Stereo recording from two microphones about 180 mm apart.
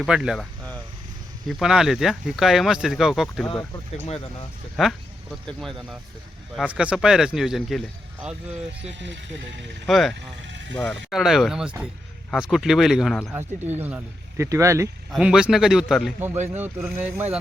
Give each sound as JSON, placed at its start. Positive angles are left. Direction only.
{"t": 0.0, "sound": "speech", "side_deg": -5}
{"t": 4.8, "sound": "speech", "side_deg": 0}
{"t": 9.8, "sound": "speech", "side_deg": 0}
{"t": 10.2, "sound": "speech", "side_deg": -85}
{"t": 10.8, "sound": "speech", "side_deg": 0}
{"t": 15.1, "sound": "speech", "side_deg": -5}